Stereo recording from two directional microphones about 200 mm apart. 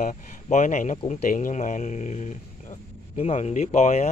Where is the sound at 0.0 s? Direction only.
40° left (ahead or behind).